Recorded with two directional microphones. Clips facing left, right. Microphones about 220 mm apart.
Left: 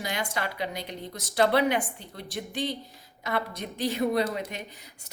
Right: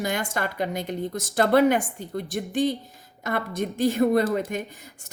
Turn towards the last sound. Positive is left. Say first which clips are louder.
# right 4 dB
turn(degrees=-50)  # may be behind; listen again after turning